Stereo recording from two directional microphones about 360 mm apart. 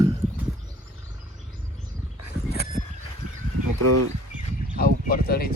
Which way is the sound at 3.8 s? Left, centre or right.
Right.